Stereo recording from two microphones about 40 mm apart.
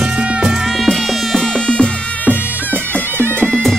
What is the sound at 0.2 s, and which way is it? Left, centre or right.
Music, right.